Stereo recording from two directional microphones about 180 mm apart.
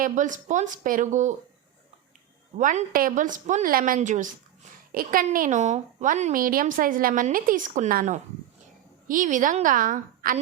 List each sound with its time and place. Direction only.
0.0 s a woman's voice: 45° right (ahead or behind)
2.6 s a woman's voice: 45° right (ahead or behind)